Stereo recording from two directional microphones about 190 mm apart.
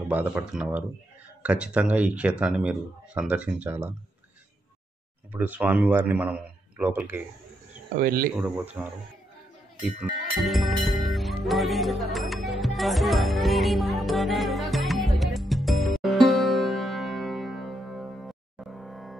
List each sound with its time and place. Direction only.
0.1 s speech: 5° right (ahead or behind)
5.3 s speech: 10° right (ahead or behind)
8.0 s speech: 50° right (ahead or behind)
8.8 s speech: 15° right (ahead or behind)
10.3 s music: centre (ahead or behind)